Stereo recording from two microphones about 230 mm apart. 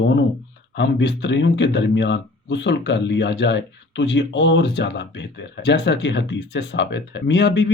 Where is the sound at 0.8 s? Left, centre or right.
Left.